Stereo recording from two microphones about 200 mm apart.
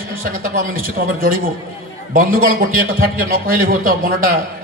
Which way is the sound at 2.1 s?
45° right (ahead or behind).